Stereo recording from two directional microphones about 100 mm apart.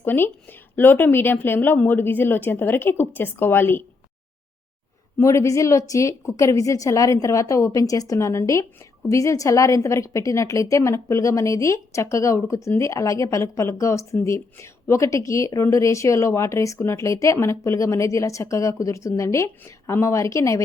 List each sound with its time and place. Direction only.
0.0 s a woman's voice: 20° left (ahead or behind)
5.2 s a woman's voice: 30° left (ahead or behind)